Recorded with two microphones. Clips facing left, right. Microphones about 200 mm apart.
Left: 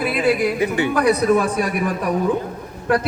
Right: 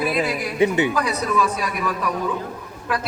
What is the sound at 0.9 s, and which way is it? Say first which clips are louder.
Speech: left 7 dB; 55° left (ahead or behind).